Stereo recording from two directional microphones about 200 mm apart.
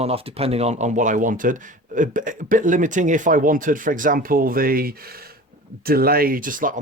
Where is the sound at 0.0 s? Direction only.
30° right (ahead or behind).